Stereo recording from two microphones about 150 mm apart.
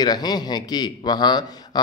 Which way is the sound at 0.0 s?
25° left (ahead or behind).